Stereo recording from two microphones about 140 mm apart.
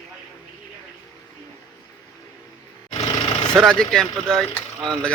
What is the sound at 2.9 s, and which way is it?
Vehicle, 35° left (ahead or behind).